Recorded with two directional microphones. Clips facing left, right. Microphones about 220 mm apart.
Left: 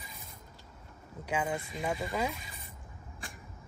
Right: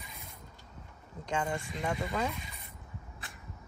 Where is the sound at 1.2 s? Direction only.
5° left (ahead or behind).